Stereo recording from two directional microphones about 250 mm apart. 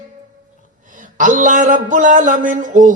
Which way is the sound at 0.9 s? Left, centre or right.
Right.